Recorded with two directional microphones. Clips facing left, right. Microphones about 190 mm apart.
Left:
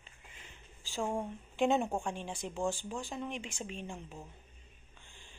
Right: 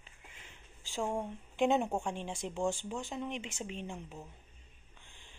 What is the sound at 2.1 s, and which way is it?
Speech, 20° right (ahead or behind).